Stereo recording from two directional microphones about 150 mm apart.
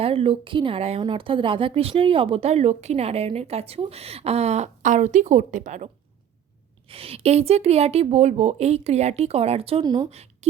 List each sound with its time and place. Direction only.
0.0 s speech: 40° right (ahead or behind)
6.8 s speech: 40° right (ahead or behind)
9.8 s speech: 25° right (ahead or behind)
10.1 s speech: 45° right (ahead or behind)